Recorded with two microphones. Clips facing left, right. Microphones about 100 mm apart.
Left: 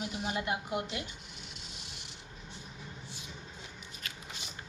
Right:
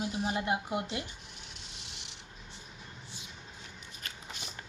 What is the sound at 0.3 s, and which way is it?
Speech, 25° right (ahead or behind).